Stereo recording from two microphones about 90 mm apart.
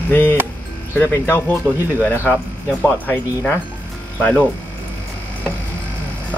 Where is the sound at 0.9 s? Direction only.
25° left (ahead or behind).